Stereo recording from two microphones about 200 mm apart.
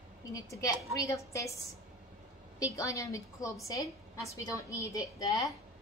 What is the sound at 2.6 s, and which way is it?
A woman's voice, 15° left (ahead or behind).